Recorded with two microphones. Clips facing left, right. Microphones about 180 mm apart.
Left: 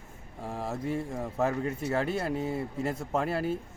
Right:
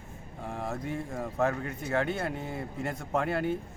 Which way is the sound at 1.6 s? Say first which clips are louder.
Left 1 dB; 30° left (ahead or behind).